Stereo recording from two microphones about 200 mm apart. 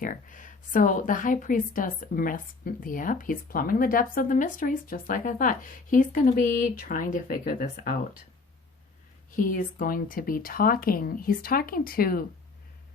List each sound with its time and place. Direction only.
0.0 s a woman's voice: 40° left (ahead or behind)
9.3 s a woman's voice: 45° left (ahead or behind)